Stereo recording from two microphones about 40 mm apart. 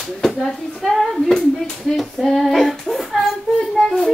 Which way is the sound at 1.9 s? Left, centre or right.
Centre.